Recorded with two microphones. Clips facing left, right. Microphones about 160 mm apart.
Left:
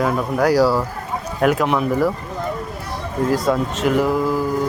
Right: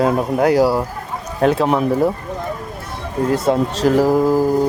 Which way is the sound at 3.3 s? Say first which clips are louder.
Right 3 dB; 25° right (ahead or behind).